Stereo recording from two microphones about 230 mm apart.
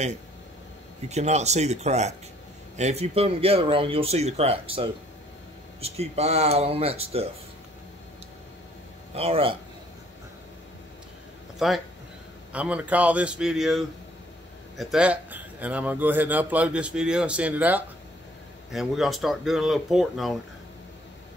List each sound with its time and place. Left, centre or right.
1.0 s speech: right
9.1 s speech: right
11.5 s a man's voice: centre